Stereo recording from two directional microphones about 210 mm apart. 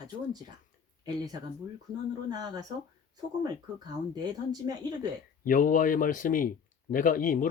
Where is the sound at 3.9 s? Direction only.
20° right (ahead or behind).